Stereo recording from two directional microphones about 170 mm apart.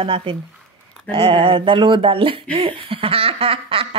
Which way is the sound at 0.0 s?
30° right (ahead or behind).